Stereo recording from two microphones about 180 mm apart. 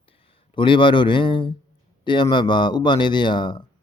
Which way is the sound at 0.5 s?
25° left (ahead or behind).